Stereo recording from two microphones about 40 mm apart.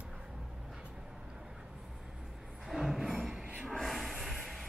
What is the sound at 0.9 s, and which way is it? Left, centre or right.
Vehicle, centre.